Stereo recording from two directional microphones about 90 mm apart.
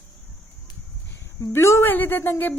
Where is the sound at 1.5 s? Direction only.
30° left (ahead or behind).